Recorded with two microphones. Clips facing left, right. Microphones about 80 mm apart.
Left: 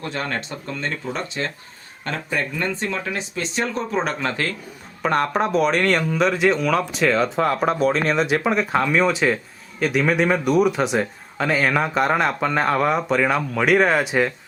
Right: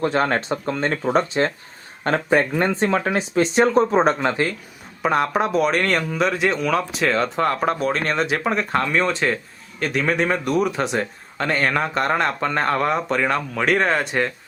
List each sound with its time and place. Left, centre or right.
0.0 s speech: right
4.1 s speech: right
5.0 s speech: centre